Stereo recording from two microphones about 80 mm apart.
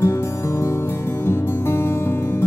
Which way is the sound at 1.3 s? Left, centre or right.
Left.